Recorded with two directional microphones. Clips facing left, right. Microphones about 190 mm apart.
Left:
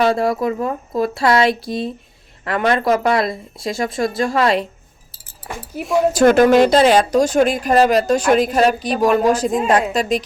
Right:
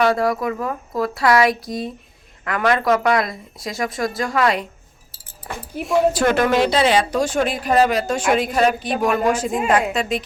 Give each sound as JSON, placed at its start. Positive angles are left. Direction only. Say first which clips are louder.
{"t": 0.0, "sound": "speech", "louder": "left 2 dB", "side_deg": 25}
{"t": 5.7, "sound": "a woman's voice", "louder": "left 1 dB", "side_deg": 0}
{"t": 6.1, "sound": "a woman's voice", "louder": "left 6 dB", "side_deg": 40}